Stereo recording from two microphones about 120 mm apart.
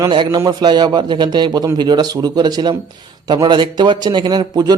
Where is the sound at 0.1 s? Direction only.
35° right (ahead or behind).